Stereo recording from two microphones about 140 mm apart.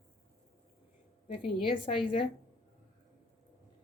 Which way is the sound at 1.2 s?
40° left (ahead or behind).